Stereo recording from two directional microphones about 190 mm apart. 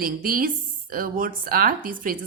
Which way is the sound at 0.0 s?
50° right (ahead or behind).